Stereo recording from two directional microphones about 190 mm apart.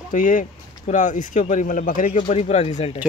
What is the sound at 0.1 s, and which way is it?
Speech, 45° left (ahead or behind).